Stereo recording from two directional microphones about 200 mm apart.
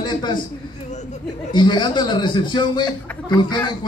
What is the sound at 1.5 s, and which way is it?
A man's voice, 25° left (ahead or behind).